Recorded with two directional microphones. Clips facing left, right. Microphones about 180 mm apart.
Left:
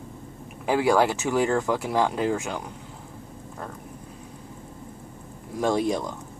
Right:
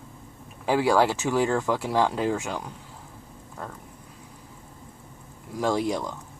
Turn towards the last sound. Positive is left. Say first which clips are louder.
# left 2 dB
turn(degrees=20)  # may be behind; listen again after turning